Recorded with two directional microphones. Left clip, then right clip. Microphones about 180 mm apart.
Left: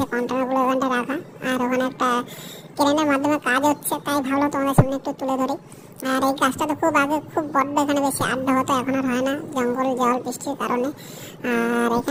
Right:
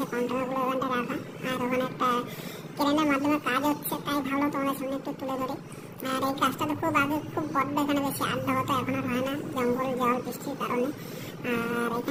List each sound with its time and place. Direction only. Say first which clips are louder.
0.0 s a woman's voice: left 6 dB; 55° left (ahead or behind)
11.4 s speech: left 8 dB; 55° left (ahead or behind)